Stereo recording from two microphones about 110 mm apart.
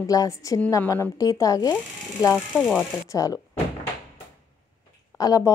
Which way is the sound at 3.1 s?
30° left (ahead or behind).